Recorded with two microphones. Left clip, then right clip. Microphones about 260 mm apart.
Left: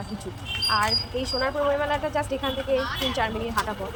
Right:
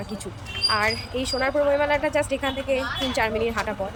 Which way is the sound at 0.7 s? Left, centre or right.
Centre.